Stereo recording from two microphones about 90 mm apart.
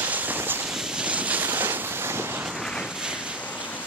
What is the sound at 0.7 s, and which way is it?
Vehicle, 5° right (ahead or behind).